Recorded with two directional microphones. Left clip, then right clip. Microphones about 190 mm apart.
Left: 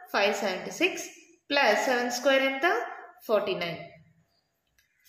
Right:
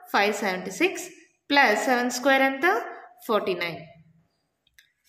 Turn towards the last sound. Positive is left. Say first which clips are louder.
# right 2 dB
turn(degrees=-35)  # may be behind; listen again after turning